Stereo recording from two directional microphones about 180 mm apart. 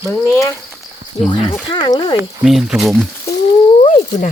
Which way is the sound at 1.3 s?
30° left (ahead or behind).